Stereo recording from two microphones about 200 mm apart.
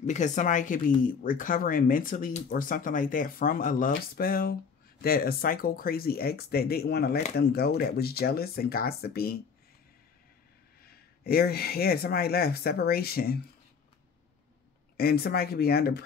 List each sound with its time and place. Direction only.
0.0 s speech: 35° left (ahead or behind)
10.8 s speech: 50° left (ahead or behind)
15.0 s speech: 50° left (ahead or behind)